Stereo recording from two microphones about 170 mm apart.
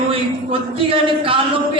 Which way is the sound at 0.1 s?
30° right (ahead or behind).